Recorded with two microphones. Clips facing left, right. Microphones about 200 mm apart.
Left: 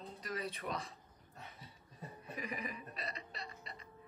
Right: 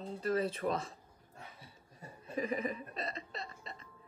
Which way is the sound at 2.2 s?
30° right (ahead or behind).